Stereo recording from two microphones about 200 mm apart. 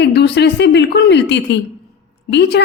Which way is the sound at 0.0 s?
55° left (ahead or behind).